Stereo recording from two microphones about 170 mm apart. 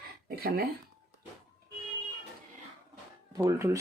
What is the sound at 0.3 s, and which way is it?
Speech, 60° right (ahead or behind).